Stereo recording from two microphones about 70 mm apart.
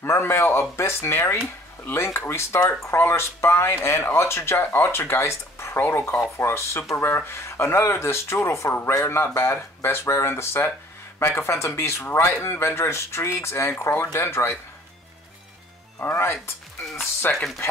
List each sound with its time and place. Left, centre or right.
0.0 s speech: left
16.0 s speech: left
17.2 s speech: left